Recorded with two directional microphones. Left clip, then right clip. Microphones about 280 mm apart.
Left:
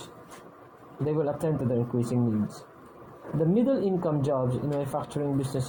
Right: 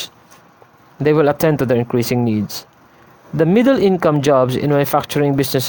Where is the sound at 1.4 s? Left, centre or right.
Right.